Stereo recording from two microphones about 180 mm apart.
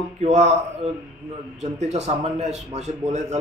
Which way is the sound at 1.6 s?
40° right (ahead or behind).